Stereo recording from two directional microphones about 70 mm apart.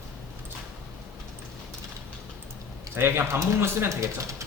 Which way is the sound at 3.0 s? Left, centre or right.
Right.